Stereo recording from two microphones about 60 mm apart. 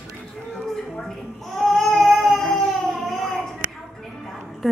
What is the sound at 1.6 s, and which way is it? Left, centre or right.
Child singing, centre.